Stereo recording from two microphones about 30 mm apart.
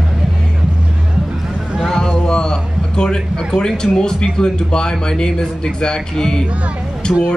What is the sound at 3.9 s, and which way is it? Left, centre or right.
A man's voice, left.